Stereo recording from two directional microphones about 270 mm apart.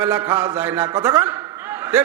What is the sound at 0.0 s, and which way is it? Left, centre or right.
A man's voice, centre.